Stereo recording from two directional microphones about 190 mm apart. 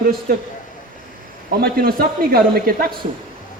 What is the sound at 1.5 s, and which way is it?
A man's voice, 55° right (ahead or behind).